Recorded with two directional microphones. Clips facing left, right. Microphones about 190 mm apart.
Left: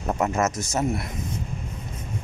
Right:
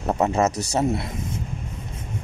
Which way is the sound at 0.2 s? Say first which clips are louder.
Right 3 dB; 30° right (ahead or behind).